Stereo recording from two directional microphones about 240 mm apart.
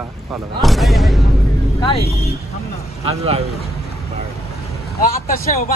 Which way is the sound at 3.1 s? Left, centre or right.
Right.